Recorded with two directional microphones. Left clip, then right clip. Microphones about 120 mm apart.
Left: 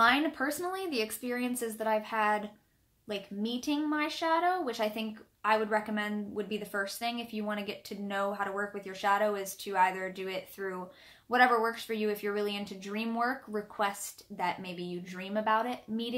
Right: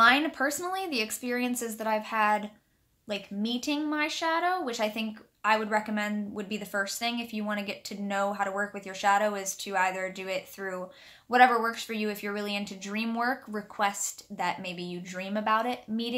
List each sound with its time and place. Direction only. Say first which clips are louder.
0.0 s speech: right 4 dB; 25° right (ahead or behind)